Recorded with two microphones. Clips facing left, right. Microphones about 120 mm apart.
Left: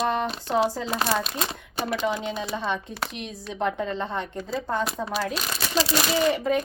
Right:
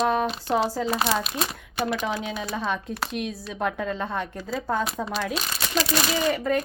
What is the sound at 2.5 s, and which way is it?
A woman's voice, centre (ahead or behind).